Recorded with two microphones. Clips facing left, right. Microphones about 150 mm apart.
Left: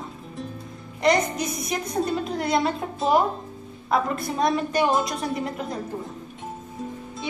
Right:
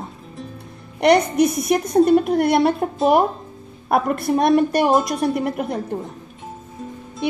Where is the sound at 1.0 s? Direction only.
65° right (ahead or behind).